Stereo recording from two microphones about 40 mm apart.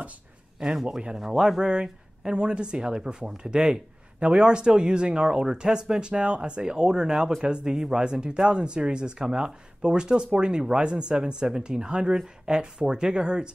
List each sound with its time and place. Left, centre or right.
0.8 s speech: centre